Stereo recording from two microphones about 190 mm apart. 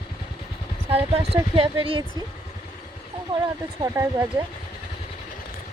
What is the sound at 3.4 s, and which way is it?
Speech, 15° right (ahead or behind).